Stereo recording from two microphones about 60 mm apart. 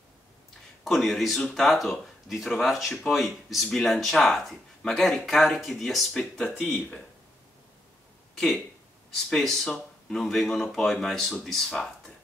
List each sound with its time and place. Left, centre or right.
0.8 s speech: centre
9.1 s speech: centre